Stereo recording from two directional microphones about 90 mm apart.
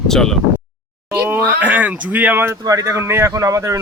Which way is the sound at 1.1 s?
25° right (ahead or behind).